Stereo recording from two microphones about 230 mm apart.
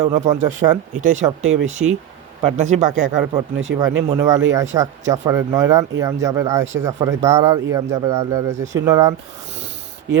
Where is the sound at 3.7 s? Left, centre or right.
Right.